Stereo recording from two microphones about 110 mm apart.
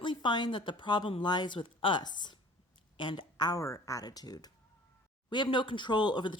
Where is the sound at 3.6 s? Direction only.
30° left (ahead or behind).